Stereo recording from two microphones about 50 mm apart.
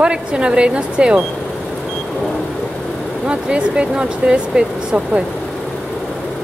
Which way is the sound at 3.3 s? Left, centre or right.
Right.